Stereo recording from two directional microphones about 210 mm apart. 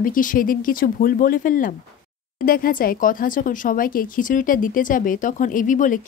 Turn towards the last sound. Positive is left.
turn(degrees=40)  # may be behind; listen again after turning